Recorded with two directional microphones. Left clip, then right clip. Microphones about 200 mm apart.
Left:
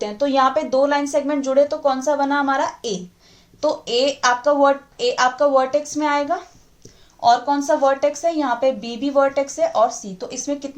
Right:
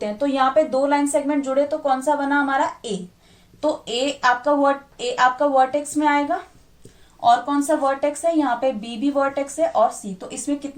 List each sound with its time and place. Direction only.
0.0 s speech: 45° left (ahead or behind)
4.4 s speech: 35° left (ahead or behind)